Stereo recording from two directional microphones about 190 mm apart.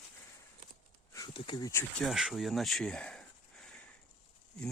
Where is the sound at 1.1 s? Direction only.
25° left (ahead or behind).